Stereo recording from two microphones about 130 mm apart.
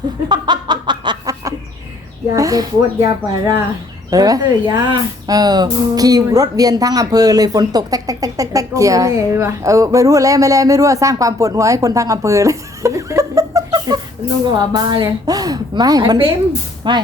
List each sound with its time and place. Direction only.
0.3 s snicker: 35° right (ahead or behind)
2.3 s a woman's voice: 25° right (ahead or behind)